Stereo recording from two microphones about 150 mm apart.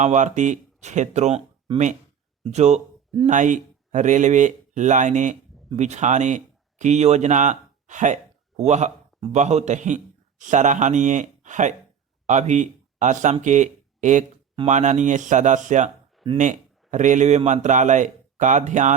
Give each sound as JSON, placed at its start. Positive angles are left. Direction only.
{"t": 0.0, "sound": "speech", "side_deg": -50}
{"t": 2.4, "sound": "a man's voice", "side_deg": -50}